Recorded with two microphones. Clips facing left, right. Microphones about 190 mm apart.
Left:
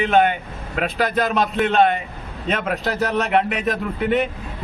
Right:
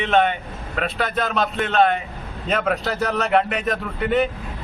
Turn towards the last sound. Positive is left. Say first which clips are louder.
# left 1 dB
turn(degrees=0)  # may be behind; listen again after turning